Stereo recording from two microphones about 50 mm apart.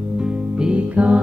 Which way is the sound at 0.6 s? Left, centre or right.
Right.